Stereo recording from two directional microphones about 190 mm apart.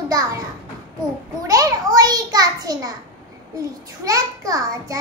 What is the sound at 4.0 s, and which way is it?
Speech, 15° right (ahead or behind).